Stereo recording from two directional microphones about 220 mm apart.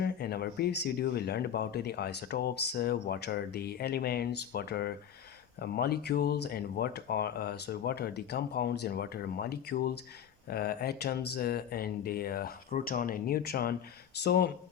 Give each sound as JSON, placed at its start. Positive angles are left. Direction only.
{"t": 0.0, "sound": "speech", "side_deg": 45}